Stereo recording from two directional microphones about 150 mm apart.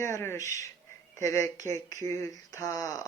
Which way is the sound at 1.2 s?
20° left (ahead or behind).